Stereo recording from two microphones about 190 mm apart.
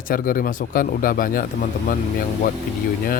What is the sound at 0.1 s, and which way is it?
Speech, 45° left (ahead or behind).